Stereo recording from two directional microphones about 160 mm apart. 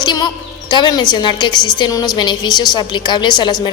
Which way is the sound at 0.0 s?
25° left (ahead or behind).